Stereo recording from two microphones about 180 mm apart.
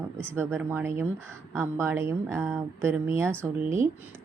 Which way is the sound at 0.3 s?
15° right (ahead or behind).